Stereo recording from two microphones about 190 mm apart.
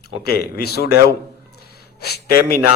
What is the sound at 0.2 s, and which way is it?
A man's voice, 55° left (ahead or behind).